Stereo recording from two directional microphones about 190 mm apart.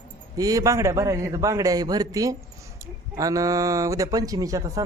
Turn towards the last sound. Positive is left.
turn(degrees=-20)  # may be behind; listen again after turning